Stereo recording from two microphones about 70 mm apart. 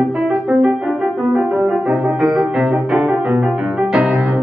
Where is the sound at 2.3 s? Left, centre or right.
Centre.